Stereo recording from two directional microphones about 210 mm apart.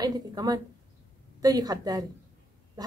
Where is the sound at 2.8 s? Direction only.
20° right (ahead or behind).